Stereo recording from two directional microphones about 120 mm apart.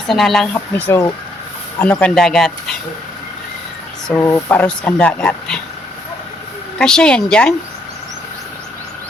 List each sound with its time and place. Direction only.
0.1 s speech: centre (ahead or behind)
0.8 s speech: 20° left (ahead or behind)
1.8 s speech: 10° left (ahead or behind)
4.1 s speech: 20° left (ahead or behind)
6.7 s speech: 5° left (ahead or behind)